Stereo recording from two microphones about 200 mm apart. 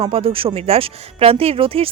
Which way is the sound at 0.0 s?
30° right (ahead or behind).